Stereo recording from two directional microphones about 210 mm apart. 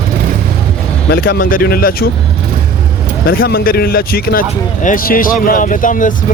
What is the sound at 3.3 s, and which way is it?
Speech, 45° left (ahead or behind).